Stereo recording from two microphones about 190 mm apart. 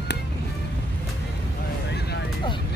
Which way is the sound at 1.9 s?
60° left (ahead or behind).